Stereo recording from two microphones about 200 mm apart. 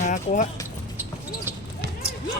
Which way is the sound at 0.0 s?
35° left (ahead or behind).